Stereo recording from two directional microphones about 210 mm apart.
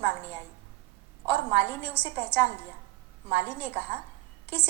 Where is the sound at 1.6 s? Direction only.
10° left (ahead or behind).